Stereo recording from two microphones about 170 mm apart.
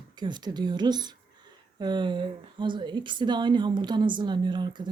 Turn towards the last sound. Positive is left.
turn(degrees=-25)  # may be behind; listen again after turning